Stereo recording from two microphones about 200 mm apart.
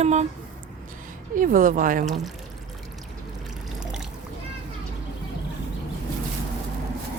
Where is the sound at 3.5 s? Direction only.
Centre (ahead or behind).